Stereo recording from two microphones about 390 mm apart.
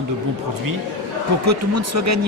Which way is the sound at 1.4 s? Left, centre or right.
Right.